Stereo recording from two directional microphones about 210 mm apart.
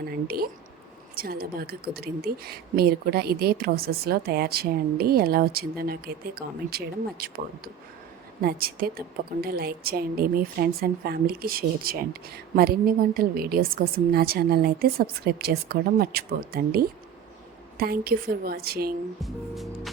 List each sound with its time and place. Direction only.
0.0 s a sound: 45° right (ahead or behind)
1.1 s a woman's voice: 45° right (ahead or behind)
19.2 s music: centre (ahead or behind)